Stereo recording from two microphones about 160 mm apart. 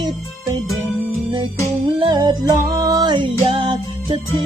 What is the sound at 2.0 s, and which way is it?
Music, 25° right (ahead or behind).